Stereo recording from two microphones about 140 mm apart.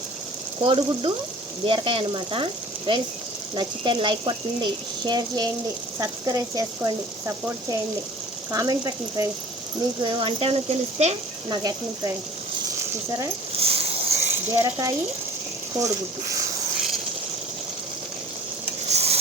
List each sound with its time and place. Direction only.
0.6 s speech: 35° right (ahead or behind)
10.0 s speech: 35° right (ahead or behind)
11.4 s speech: 25° right (ahead or behind)
13.6 s a sound: 45° right (ahead or behind)
14.5 s speech: 20° right (ahead or behind)
18.9 s a sound: 50° right (ahead or behind)